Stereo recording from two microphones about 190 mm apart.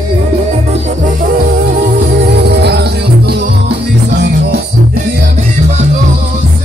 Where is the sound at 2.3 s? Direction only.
60° right (ahead or behind).